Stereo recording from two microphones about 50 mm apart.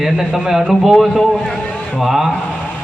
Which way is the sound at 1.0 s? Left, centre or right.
Centre.